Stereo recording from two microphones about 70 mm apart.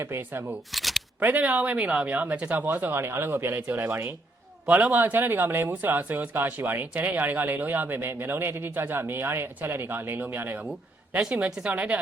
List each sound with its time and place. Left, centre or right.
0.0 s speech: right
0.7 s shuffling cards: centre
1.2 s speech: right
4.6 s speech: right